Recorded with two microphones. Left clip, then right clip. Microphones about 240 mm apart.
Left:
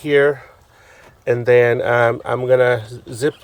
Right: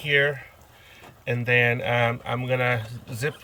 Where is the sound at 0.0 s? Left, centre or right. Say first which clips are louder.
Left 7 dB; left.